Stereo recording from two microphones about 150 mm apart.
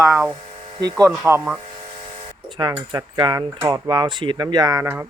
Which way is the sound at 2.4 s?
30° right (ahead or behind).